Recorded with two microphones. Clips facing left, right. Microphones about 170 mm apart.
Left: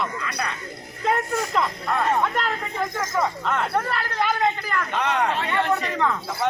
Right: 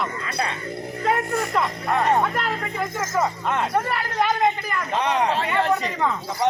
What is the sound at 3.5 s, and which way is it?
A man's voice, 15° right (ahead or behind).